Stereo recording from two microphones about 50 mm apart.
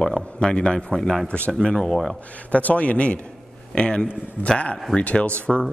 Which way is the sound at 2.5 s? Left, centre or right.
Left.